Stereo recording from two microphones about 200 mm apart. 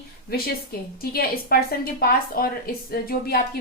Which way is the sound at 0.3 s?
50° left (ahead or behind).